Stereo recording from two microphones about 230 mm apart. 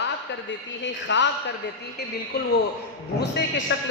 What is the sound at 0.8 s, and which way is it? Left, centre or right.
Speech, left.